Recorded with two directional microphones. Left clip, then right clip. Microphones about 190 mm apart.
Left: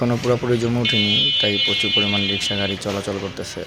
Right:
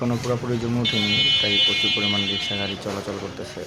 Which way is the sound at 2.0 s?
20° left (ahead or behind).